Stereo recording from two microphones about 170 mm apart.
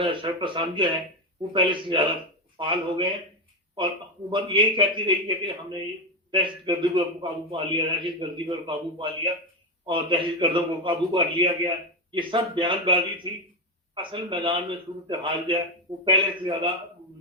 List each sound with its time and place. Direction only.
0.0 s a man's voice: 30° right (ahead or behind)
4.3 s a man's voice: 30° right (ahead or behind)